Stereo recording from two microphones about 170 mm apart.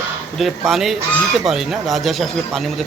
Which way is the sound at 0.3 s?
Centre (ahead or behind).